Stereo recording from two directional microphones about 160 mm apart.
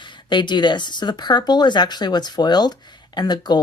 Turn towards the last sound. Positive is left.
turn(degrees=25)  # may be behind; listen again after turning